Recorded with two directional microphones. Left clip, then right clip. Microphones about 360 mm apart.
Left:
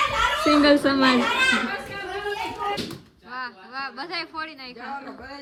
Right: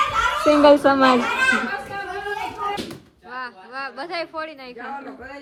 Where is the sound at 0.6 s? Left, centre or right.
Centre.